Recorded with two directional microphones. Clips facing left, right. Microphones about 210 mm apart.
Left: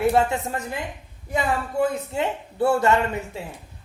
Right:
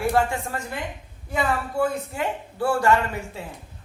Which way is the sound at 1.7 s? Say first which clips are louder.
Left 4 dB; 25° left (ahead or behind).